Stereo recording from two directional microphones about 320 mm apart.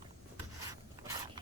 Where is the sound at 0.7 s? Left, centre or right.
Centre.